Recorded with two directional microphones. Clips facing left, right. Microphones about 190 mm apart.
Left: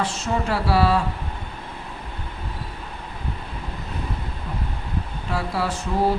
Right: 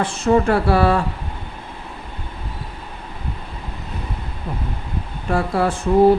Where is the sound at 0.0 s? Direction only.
55° right (ahead or behind).